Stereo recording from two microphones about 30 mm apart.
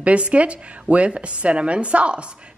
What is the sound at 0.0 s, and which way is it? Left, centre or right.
A woman's voice, right.